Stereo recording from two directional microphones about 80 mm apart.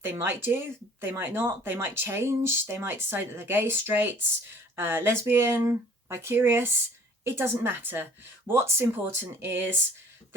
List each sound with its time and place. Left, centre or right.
0.0 s speech: right